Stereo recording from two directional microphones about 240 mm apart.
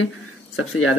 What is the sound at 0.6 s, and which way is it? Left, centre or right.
Speech, left.